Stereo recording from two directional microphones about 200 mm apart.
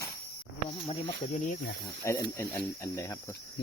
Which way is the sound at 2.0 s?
15° left (ahead or behind).